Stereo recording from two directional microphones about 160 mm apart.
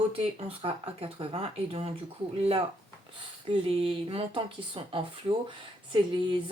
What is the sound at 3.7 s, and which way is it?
Speech, 35° right (ahead or behind).